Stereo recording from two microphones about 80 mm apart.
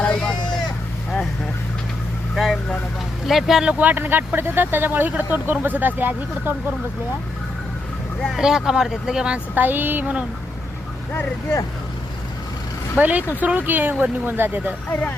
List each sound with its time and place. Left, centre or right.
0.0 s vehicle: centre
2.3 s speech: centre
3.8 s speech: right
8.3 s speech: centre
9.6 s speech: right
11.1 s speech: left
13.0 s speech: right